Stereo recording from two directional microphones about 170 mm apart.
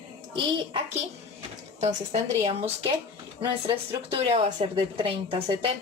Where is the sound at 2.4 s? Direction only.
35° right (ahead or behind).